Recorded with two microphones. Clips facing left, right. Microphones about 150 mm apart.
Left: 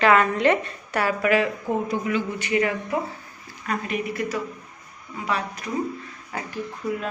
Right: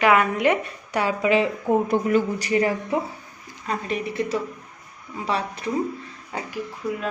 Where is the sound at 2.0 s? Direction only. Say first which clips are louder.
Right 5 dB; 40° right (ahead or behind); by 6.5 s 25° right (ahead or behind).